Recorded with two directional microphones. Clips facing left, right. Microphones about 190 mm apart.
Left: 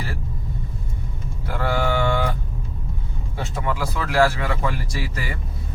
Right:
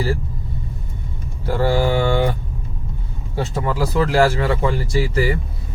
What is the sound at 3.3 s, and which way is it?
Speech, 35° right (ahead or behind).